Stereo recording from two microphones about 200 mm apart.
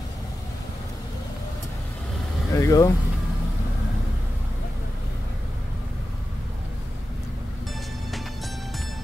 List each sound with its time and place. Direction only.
2.5 s speech: 15° left (ahead or behind)